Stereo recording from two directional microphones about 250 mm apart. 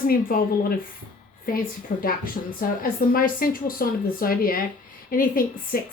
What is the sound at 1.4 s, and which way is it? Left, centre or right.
A woman's voice, left.